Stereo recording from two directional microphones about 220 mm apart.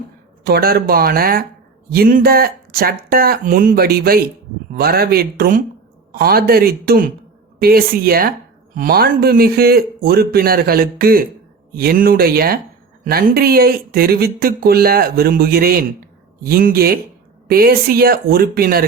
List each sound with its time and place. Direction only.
0.4 s speech: 45° right (ahead or behind)